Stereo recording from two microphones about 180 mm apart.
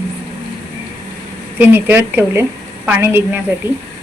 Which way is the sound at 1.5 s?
10° right (ahead or behind).